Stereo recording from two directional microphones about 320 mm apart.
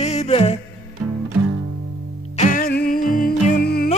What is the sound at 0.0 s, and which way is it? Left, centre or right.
Music, left.